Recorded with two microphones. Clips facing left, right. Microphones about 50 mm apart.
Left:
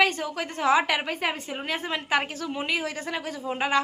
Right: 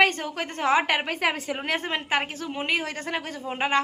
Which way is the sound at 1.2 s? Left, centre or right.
Right.